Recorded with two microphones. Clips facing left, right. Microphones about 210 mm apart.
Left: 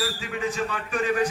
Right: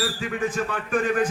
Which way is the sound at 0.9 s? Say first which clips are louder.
Right 2 dB; 50° right (ahead or behind).